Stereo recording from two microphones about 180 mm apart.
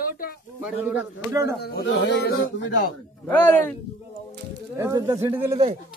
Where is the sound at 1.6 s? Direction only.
65° left (ahead or behind).